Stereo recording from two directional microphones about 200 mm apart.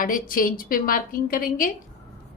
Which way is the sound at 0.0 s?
45° left (ahead or behind).